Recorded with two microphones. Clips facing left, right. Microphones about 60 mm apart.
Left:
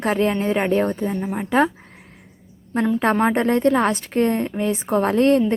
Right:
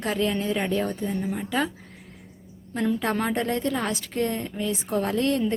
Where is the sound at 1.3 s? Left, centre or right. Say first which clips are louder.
Left 12 dB; left.